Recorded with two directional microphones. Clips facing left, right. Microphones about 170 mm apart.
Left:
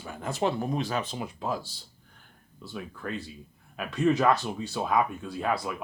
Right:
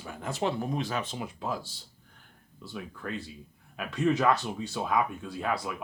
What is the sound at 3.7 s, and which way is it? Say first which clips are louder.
Speech: left 2 dB; 35° left (ahead or behind).